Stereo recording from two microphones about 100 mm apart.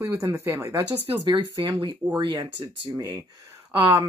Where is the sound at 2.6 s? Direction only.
35° right (ahead or behind).